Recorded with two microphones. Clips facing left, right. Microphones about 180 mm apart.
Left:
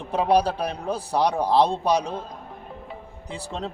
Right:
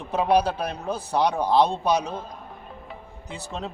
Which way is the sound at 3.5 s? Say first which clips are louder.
Left 1 dB; 5° right (ahead or behind).